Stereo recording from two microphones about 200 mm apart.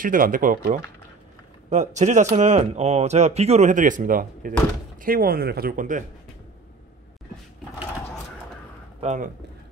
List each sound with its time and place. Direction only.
0.0 s speech: 45° right (ahead or behind)
2.0 s speech: 35° right (ahead or behind)
9.0 s speech: 35° right (ahead or behind)